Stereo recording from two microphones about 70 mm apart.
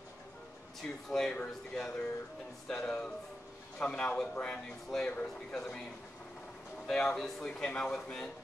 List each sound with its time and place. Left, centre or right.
0.8 s speech: centre
6.9 s speech: centre